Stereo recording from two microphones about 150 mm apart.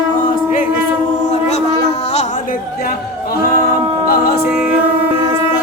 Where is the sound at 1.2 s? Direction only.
50° left (ahead or behind).